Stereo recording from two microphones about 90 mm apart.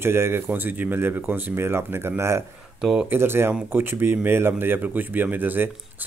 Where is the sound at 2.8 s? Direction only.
10° right (ahead or behind).